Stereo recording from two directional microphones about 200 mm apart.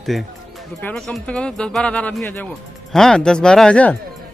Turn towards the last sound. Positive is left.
turn(degrees=5)  # may be behind; listen again after turning